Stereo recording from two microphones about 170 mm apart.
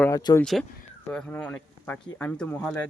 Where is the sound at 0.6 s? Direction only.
Centre (ahead or behind).